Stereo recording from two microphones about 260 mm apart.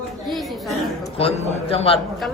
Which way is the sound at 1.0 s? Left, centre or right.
Left.